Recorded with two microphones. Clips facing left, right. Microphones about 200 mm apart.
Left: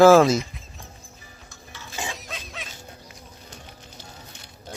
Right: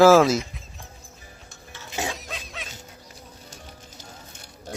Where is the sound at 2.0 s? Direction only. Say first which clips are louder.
Right 3 dB; centre (ahead or behind).